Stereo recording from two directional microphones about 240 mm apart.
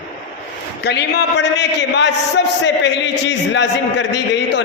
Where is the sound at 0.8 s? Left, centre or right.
Left.